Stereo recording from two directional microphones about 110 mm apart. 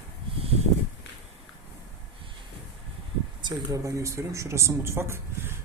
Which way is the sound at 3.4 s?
30° right (ahead or behind).